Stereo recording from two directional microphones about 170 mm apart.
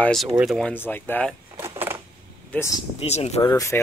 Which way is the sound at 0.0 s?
Centre (ahead or behind).